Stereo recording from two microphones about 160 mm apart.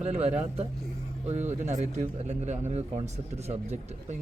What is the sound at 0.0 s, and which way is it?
Speech, 40° right (ahead or behind).